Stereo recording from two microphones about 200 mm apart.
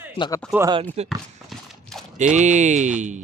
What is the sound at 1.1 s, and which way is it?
Horse, centre (ahead or behind).